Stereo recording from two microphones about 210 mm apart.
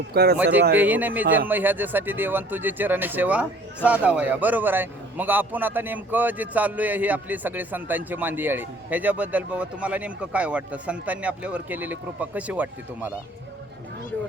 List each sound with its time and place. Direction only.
0.1 s speech: 50° right (ahead or behind)
0.8 s a man's voice: 10° right (ahead or behind)